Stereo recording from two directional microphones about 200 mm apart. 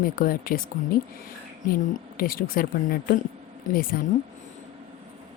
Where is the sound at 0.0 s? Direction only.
45° left (ahead or behind).